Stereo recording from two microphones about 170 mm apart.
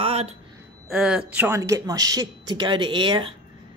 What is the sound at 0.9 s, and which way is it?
Speech, 5° right (ahead or behind).